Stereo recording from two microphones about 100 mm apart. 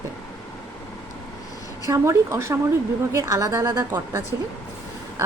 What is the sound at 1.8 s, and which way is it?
A woman's voice, 30° right (ahead or behind).